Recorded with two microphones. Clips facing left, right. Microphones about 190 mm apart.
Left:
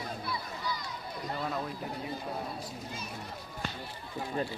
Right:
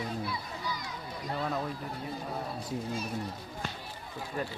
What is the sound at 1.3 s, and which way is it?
Speech, centre (ahead or behind).